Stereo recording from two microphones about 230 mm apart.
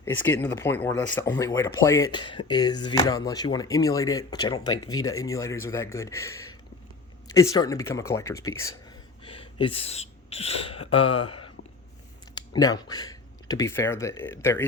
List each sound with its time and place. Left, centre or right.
0.0 s speech: centre
9.2 s speech: left